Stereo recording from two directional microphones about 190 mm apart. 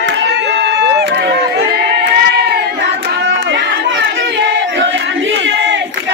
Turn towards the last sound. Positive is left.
turn(degrees=-75)  # may be behind; listen again after turning